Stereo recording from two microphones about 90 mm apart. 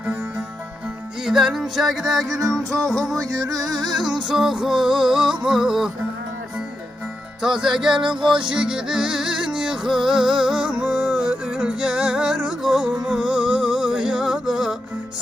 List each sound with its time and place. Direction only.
0.0 s music: 15° right (ahead or behind)
1.2 s music: 5° right (ahead or behind)
3.2 s music: 45° right (ahead or behind)
3.9 s music: 5° right (ahead or behind)
7.4 s music: 5° right (ahead or behind)